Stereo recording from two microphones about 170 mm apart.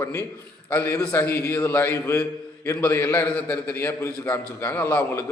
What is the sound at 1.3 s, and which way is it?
Speech, 65° left (ahead or behind).